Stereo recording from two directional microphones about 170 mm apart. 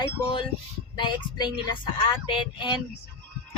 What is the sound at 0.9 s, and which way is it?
Speech, 30° left (ahead or behind).